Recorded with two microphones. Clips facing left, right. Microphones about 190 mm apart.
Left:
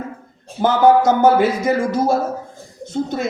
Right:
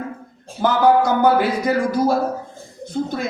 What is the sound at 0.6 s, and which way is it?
A man's voice, 20° left (ahead or behind).